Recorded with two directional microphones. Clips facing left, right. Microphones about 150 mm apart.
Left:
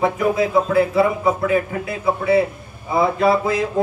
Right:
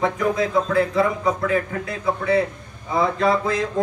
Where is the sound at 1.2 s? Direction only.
25° left (ahead or behind).